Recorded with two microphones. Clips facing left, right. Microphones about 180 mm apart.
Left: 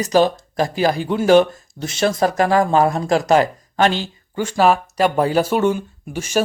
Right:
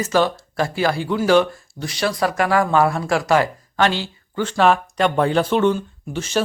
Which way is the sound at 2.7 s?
40° left (ahead or behind).